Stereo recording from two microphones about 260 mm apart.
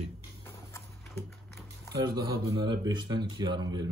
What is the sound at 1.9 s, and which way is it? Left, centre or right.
A man's voice, centre.